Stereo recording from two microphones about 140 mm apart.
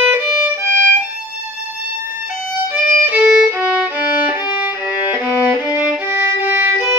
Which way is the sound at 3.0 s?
10° right (ahead or behind).